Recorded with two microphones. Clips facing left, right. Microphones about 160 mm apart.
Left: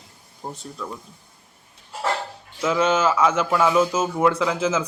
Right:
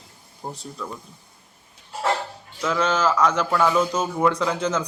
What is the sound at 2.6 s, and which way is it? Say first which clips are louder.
A man's voice: left 2 dB; 10° left (ahead or behind).